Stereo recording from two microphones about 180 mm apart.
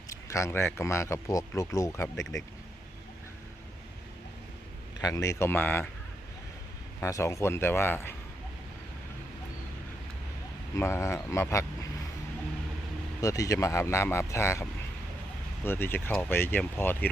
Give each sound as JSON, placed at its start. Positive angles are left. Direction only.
{"t": 0.1, "sound": "speech", "side_deg": 15}
{"t": 2.1, "sound": "speech", "side_deg": 90}
{"t": 4.9, "sound": "speech", "side_deg": 20}
{"t": 7.0, "sound": "speech", "side_deg": 15}
{"t": 10.8, "sound": "speech", "side_deg": 15}
{"t": 13.2, "sound": "speech", "side_deg": 20}
{"t": 15.6, "sound": "speech", "side_deg": 10}